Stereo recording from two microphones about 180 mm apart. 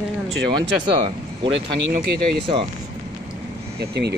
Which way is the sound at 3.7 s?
65° right (ahead or behind).